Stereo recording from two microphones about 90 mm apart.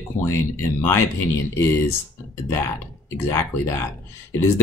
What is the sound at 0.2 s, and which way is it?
Speech, 30° left (ahead or behind).